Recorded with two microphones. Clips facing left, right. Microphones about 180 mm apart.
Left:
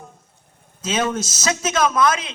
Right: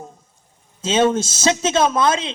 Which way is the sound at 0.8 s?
30° right (ahead or behind).